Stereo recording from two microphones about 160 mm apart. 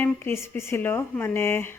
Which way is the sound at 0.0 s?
15° left (ahead or behind).